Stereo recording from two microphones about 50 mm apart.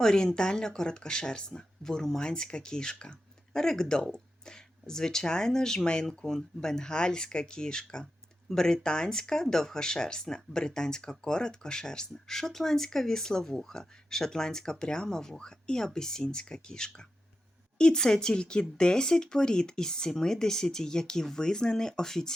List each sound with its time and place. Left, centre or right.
0.0 s speech: centre